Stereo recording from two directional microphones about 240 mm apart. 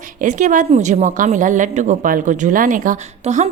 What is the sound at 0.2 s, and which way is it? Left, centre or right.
A woman's voice, right.